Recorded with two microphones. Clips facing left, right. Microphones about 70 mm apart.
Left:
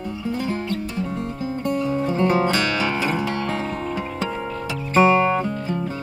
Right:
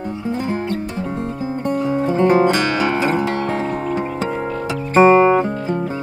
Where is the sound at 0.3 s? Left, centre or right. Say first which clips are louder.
Right 3 dB; right.